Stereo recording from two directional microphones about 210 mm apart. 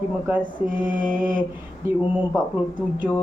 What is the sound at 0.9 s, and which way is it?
Mantra, 40° right (ahead or behind).